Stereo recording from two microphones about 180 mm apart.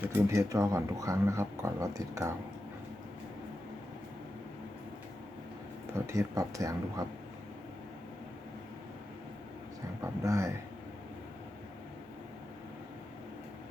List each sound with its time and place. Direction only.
0.0 s speech: 15° right (ahead or behind)
6.1 s speech: 15° right (ahead or behind)
10.0 s speech: 15° right (ahead or behind)